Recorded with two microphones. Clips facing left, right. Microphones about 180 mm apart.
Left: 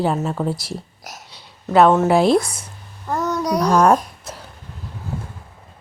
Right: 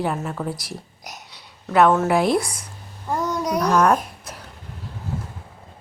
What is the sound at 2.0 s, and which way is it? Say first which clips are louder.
Speech: left 4 dB; 30° left (ahead or behind).